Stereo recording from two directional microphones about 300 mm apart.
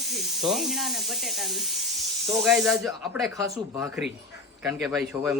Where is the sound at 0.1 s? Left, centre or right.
Centre.